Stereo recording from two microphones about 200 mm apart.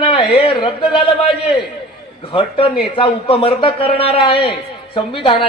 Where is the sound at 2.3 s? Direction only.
25° left (ahead or behind).